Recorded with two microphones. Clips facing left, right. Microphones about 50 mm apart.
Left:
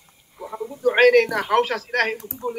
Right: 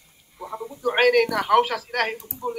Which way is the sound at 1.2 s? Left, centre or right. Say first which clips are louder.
Even; centre.